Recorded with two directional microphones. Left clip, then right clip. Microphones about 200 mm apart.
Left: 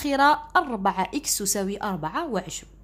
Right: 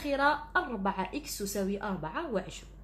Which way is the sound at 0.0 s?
40° left (ahead or behind).